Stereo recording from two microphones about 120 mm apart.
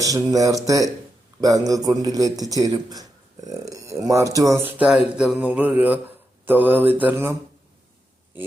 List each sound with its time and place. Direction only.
0.0 s a man's voice: 30° right (ahead or behind)
4.6 s speech: 10° right (ahead or behind)